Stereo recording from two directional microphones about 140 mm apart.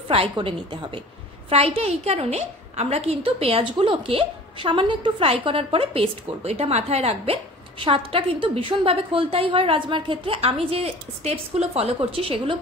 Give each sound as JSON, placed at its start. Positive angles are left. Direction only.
{"t": 0.1, "sound": "a woman's voice", "side_deg": -40}